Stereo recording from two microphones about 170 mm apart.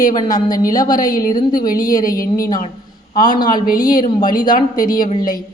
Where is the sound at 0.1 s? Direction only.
25° left (ahead or behind).